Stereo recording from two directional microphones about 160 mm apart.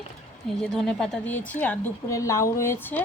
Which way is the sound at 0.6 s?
5° left (ahead or behind).